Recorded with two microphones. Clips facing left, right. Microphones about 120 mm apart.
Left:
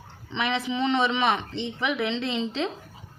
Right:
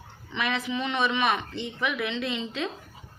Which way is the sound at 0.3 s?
25° left (ahead or behind).